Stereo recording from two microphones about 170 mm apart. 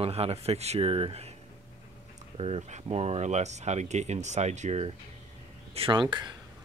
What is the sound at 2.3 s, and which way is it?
Speech, 35° right (ahead or behind).